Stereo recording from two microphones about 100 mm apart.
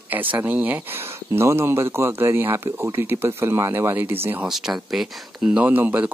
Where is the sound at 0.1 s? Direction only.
20° right (ahead or behind).